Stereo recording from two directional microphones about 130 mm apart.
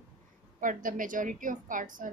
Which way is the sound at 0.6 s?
90° right.